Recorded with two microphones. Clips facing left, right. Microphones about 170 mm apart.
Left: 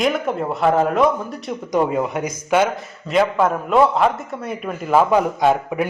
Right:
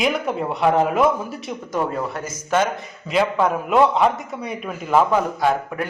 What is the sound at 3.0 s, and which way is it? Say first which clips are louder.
A man's voice: left 2 dB; centre (ahead or behind).